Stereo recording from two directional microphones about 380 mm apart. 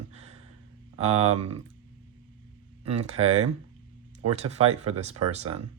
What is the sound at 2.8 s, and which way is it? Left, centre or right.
Speech, centre.